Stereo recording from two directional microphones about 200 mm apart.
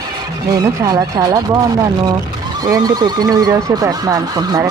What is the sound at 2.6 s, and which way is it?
Speech, 20° right (ahead or behind).